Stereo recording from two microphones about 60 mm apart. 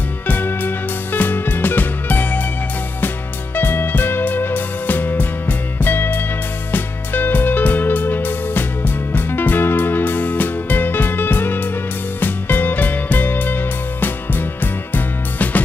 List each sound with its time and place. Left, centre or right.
0.3 s music: left
3.5 s music: left